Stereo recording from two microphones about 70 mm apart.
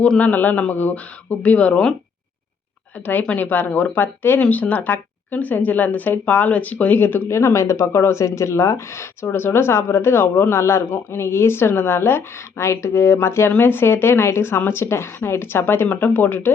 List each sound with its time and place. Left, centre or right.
0.2 s speech: left
3.1 s speech: left